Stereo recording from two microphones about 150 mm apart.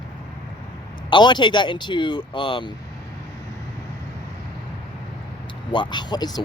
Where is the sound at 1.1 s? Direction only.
30° left (ahead or behind).